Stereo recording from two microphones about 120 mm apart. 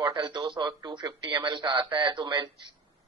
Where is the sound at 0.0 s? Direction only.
40° right (ahead or behind).